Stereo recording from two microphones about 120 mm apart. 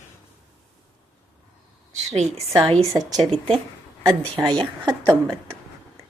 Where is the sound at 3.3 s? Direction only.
50° right (ahead or behind).